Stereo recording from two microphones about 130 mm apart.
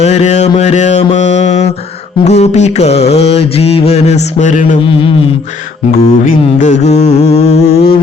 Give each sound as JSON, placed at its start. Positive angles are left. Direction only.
{"t": 0.0, "sound": "mantra", "side_deg": 60}
{"t": 4.9, "sound": "a sound", "side_deg": 40}
{"t": 6.2, "sound": "mantra", "side_deg": 70}